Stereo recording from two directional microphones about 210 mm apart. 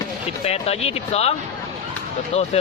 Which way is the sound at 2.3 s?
30° left (ahead or behind).